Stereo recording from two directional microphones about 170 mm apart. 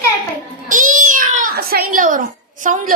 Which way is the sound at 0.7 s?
50° right (ahead or behind).